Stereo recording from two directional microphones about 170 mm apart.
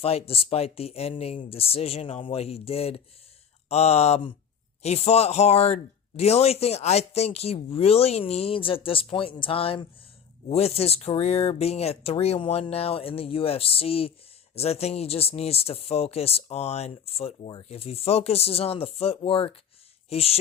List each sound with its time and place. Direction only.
0.0 s speech: 35° left (ahead or behind)